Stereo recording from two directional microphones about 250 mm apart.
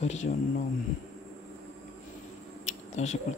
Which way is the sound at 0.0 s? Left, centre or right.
Left.